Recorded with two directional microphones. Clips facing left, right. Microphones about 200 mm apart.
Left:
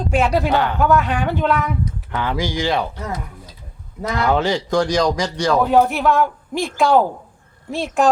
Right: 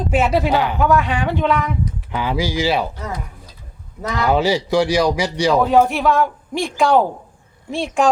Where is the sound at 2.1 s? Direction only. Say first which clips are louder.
Right 1 dB; 10° right (ahead or behind).